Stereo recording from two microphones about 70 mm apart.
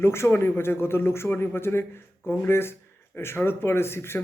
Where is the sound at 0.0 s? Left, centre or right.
Left.